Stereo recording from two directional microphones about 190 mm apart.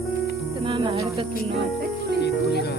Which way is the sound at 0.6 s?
25° right (ahead or behind).